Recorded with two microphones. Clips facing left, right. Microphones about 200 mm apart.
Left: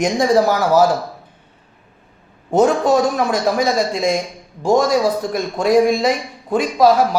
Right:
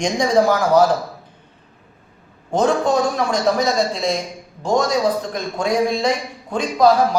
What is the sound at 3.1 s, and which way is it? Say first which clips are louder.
A man's voice: left 1 dB; 10° left (ahead or behind).